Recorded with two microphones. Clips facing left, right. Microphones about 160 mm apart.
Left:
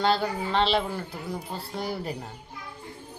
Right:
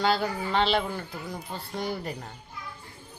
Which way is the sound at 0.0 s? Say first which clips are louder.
Left 1 dB; centre (ahead or behind).